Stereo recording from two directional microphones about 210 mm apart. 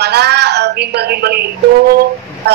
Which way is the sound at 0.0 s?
50° right (ahead or behind).